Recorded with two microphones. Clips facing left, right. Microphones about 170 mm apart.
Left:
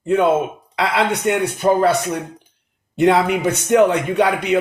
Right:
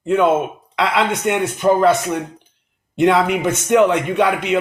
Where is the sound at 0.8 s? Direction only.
35° left (ahead or behind).